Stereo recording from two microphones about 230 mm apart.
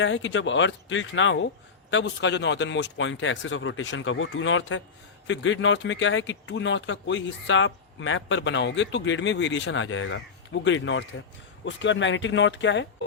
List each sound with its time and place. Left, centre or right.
0.0 s speech: left